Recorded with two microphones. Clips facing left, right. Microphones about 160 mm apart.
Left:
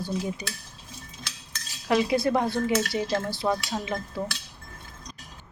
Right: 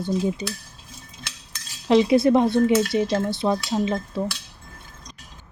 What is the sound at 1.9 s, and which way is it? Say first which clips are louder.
Speech: right 7 dB; 25° right (ahead or behind).